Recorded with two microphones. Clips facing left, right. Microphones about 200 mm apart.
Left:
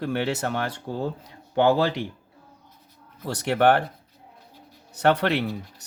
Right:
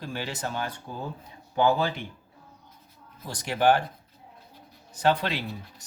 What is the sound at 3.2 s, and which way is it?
Speech, 65° left (ahead or behind).